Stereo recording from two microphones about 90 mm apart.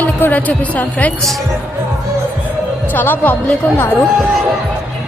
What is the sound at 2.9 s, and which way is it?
Speech, 20° left (ahead or behind).